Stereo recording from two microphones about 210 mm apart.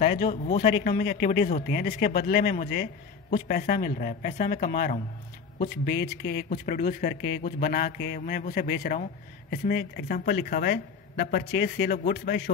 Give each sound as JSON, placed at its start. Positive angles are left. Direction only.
{"t": 0.0, "sound": "a man's voice", "side_deg": 45}